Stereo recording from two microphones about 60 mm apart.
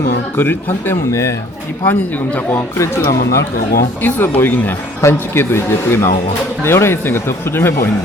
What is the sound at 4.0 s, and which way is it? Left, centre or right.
Speech, left.